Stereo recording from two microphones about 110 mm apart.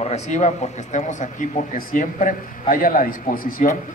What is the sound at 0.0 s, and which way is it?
Speech, 85° left.